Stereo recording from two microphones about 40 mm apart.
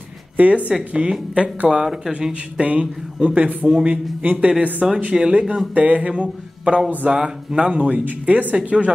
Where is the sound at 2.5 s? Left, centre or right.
Right.